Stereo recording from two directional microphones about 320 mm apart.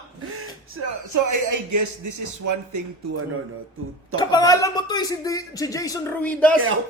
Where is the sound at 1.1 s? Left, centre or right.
Right.